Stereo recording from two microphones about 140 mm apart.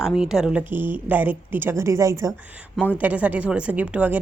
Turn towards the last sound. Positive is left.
turn(degrees=-10)  # may be behind; listen again after turning